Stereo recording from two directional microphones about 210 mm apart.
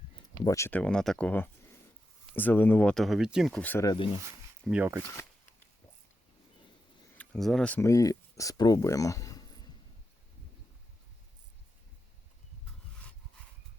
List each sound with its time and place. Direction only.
0.4 s speech: 15° left (ahead or behind)
3.8 s speech: 25° left (ahead or behind)
4.6 s speech: 5° right (ahead or behind)
7.2 s speech: centre (ahead or behind); by 9.6 s 20° left (ahead or behind)